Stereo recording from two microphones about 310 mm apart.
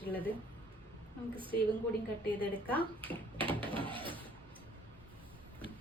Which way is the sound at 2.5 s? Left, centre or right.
Centre.